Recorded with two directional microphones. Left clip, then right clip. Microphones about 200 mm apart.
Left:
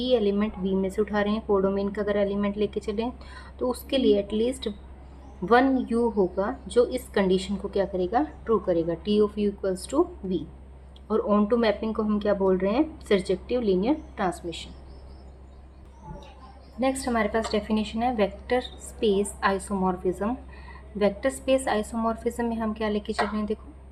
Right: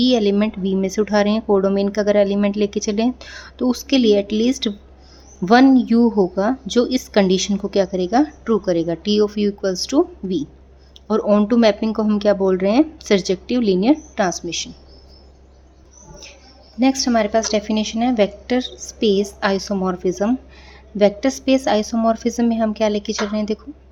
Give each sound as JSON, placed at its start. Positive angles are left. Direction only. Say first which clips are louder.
{"t": 0.0, "sound": "a woman's voice", "louder": "right 7 dB", "side_deg": -45}
{"t": 16.8, "sound": "a woman's voice", "louder": "right 8 dB", "side_deg": -40}